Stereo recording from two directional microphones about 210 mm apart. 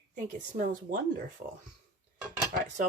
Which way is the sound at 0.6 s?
40° right (ahead or behind).